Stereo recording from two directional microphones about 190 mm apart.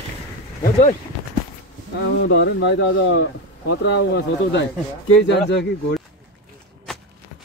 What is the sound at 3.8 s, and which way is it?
Speech, 65° left (ahead or behind).